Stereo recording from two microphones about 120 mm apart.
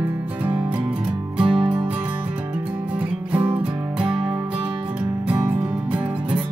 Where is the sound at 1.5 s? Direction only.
50° right (ahead or behind).